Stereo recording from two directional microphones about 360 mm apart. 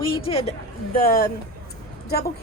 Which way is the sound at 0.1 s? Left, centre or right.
Centre.